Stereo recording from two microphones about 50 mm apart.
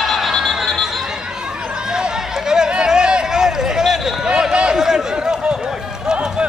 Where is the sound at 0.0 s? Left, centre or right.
Centre.